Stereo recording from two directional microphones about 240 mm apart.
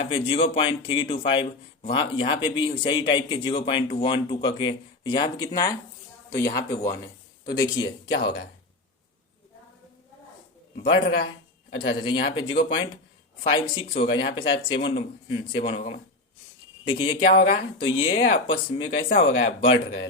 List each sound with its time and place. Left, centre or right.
0.0 s speech: left
10.8 s speech: left
14.1 s speech: left
14.3 s speech: left